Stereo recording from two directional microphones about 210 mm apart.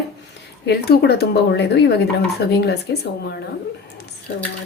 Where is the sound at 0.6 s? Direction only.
50° left (ahead or behind).